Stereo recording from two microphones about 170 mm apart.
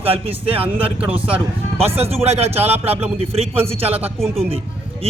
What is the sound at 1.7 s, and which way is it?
Speech, 35° right (ahead or behind).